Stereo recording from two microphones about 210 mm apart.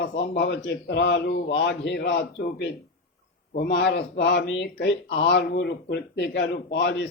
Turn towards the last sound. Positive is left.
turn(degrees=50)  # may be behind; listen again after turning